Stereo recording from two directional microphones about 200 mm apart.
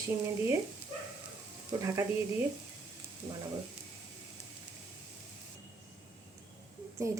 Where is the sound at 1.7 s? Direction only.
15° right (ahead or behind).